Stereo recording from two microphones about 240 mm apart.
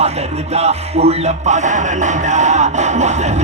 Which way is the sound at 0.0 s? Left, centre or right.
Right.